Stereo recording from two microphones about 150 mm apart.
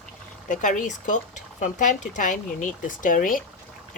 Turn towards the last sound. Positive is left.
turn(degrees=65)  # may be behind; listen again after turning